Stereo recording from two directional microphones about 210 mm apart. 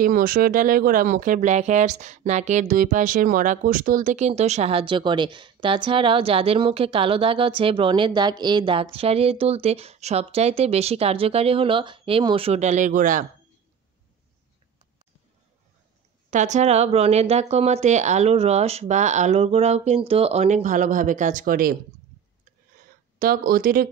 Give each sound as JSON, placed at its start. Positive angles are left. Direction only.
{"t": 0.0, "sound": "speech", "side_deg": -40}
{"t": 16.3, "sound": "speech", "side_deg": -35}
{"t": 23.1, "sound": "speech", "side_deg": -45}